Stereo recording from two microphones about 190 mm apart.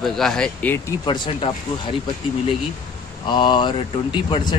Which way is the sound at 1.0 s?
25° left (ahead or behind).